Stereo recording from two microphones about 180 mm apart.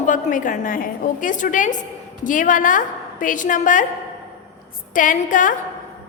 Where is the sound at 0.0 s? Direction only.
45° left (ahead or behind).